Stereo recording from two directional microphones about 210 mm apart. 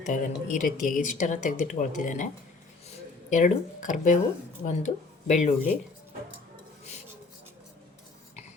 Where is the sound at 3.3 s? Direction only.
35° left (ahead or behind).